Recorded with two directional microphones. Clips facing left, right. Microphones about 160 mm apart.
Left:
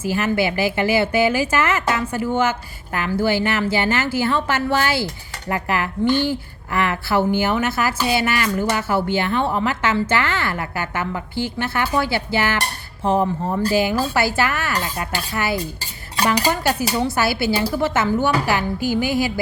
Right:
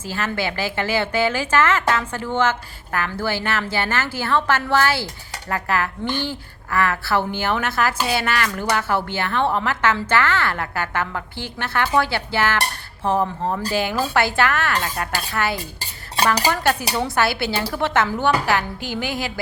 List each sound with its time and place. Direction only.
0.0 s speech: 10° left (ahead or behind)